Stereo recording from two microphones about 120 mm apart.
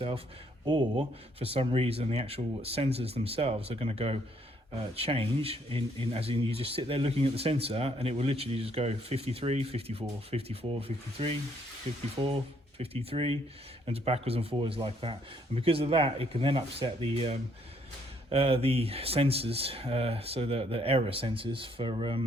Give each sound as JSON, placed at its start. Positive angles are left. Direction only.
{"t": 0.6, "sound": "speech", "side_deg": -40}
{"t": 12.2, "sound": "speech", "side_deg": -35}
{"t": 12.8, "sound": "speech", "side_deg": -55}